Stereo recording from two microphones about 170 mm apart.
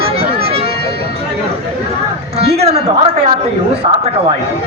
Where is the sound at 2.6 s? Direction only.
40° right (ahead or behind).